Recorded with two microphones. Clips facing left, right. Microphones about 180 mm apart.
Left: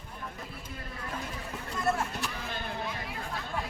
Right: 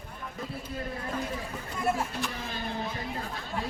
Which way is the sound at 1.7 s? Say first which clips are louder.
Right 1 dB; 10° right (ahead or behind).